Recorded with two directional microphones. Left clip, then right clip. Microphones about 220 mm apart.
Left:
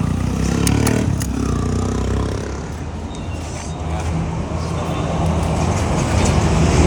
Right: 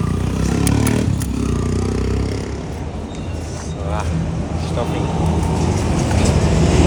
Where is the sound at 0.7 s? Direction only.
20° right (ahead or behind).